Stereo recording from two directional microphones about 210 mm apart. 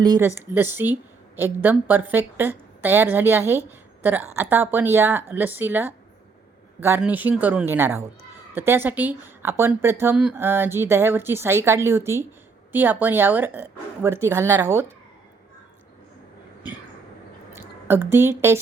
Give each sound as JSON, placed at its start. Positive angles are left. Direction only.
{"t": 0.0, "sound": "a woman's voice", "side_deg": -20}
{"t": 17.5, "sound": "a woman's voice", "side_deg": -10}